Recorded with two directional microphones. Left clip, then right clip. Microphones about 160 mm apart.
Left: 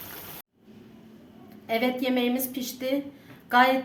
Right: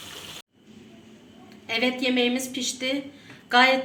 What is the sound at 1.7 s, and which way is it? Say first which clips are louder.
A woman's voice: right 1 dB; 90° left.